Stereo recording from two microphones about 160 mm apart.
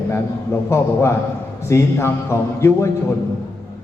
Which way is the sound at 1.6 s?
15° left (ahead or behind).